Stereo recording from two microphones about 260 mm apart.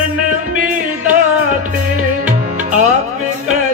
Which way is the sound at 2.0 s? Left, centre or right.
Right.